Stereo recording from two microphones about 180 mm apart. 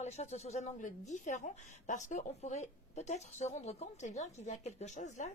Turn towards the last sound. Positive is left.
turn(degrees=40)  # may be behind; listen again after turning